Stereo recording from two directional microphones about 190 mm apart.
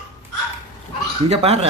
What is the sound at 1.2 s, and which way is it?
Speech, 35° right (ahead or behind).